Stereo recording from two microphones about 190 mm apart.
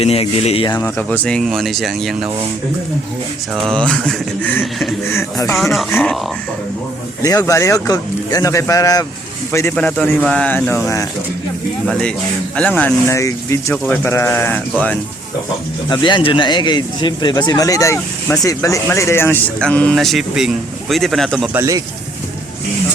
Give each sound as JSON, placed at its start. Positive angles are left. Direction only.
{"t": 0.0, "sound": "speech", "side_deg": 30}
{"t": 0.8, "sound": "speech", "side_deg": 10}
{"t": 3.5, "sound": "speech", "side_deg": 0}
{"t": 5.1, "sound": "speech", "side_deg": 15}
{"t": 5.5, "sound": "speech", "side_deg": 0}
{"t": 7.2, "sound": "speech", "side_deg": 20}
{"t": 12.5, "sound": "speech", "side_deg": 10}
{"t": 15.9, "sound": "speech", "side_deg": 25}
{"t": 21.5, "sound": "speech", "side_deg": -15}